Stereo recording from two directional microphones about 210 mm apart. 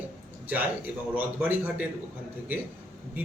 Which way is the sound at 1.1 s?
10° right (ahead or behind).